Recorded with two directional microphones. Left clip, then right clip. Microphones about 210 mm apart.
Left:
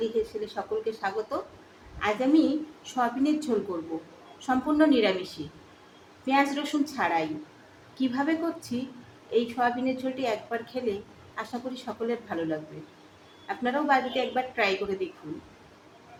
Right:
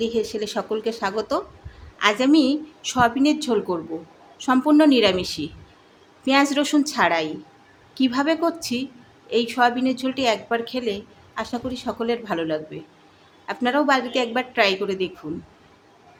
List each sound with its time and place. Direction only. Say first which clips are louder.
0.4 s a woman's voice: right 6 dB; 50° right (ahead or behind)